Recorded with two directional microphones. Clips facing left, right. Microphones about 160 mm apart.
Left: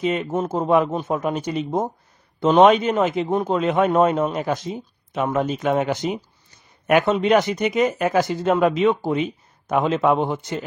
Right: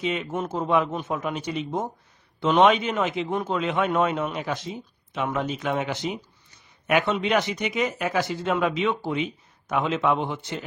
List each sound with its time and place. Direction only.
0.0 s speech: 45° left (ahead or behind)